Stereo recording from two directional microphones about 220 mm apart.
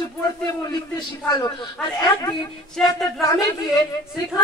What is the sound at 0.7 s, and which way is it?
A man's voice, 20° left (ahead or behind).